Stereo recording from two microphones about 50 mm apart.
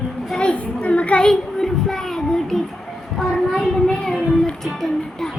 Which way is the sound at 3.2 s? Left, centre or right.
Centre.